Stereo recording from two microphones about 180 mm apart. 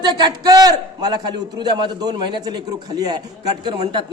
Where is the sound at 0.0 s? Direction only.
20° right (ahead or behind).